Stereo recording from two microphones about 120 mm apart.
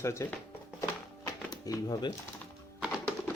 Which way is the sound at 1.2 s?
30° left (ahead or behind).